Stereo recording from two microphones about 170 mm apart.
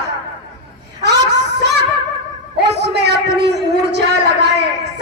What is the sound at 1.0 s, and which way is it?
A man's voice, 85° right.